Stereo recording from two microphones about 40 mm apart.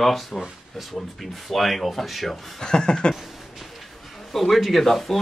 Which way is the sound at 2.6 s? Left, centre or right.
Centre.